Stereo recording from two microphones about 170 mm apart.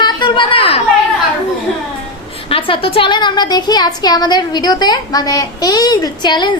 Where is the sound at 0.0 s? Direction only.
30° left (ahead or behind).